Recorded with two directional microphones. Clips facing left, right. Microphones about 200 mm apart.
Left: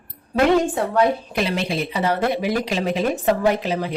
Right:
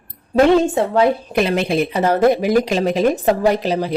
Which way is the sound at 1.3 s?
55° right (ahead or behind).